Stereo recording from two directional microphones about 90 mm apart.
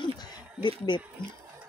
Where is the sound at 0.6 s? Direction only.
60° left (ahead or behind).